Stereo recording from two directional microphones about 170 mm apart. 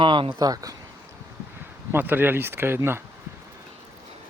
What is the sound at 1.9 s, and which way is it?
Speech, 10° right (ahead or behind).